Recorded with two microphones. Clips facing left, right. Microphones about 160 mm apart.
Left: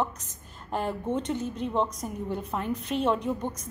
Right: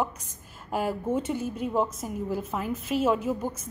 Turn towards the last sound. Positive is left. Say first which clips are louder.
# right 1 dB
turn(degrees=-5)  # may be behind; listen again after turning